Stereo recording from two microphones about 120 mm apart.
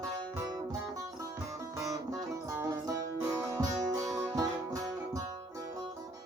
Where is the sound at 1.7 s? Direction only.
30° right (ahead or behind).